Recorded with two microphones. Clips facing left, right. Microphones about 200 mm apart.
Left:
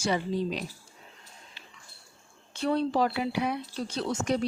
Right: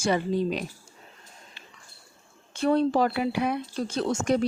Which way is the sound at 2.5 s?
50° right (ahead or behind).